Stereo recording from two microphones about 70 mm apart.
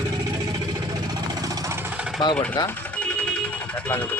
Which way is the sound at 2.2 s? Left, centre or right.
Left.